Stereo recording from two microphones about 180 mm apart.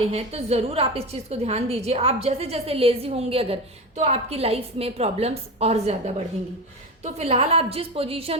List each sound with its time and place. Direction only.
0.1 s a woman's voice: 35° right (ahead or behind)
7.0 s a woman's voice: 35° right (ahead or behind)